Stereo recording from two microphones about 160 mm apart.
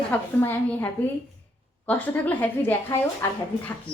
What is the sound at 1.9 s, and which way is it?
A woman's voice, 10° left (ahead or behind).